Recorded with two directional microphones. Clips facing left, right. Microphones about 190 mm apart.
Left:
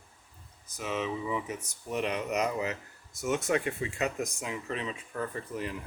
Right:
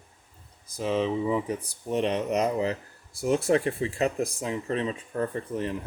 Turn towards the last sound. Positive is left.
turn(degrees=-30)  # may be behind; listen again after turning